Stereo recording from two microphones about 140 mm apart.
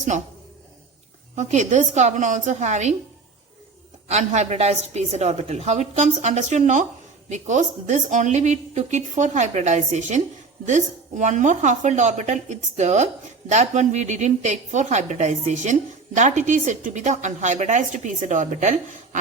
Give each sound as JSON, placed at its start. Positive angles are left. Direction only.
{"t": 0.1, "sound": "a woman's voice", "side_deg": -60}
{"t": 1.4, "sound": "a woman's voice", "side_deg": -60}
{"t": 4.1, "sound": "a woman's voice", "side_deg": -55}